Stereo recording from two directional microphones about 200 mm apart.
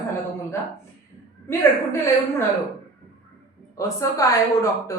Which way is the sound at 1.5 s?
15° left (ahead or behind).